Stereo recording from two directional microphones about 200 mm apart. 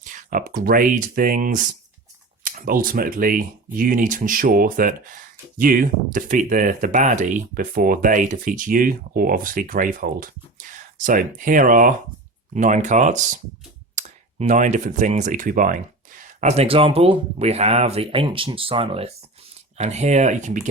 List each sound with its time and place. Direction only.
0.0 s speech: 40° right (ahead or behind)